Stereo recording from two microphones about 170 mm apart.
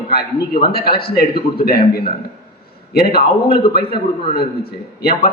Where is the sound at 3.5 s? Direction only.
35° left (ahead or behind).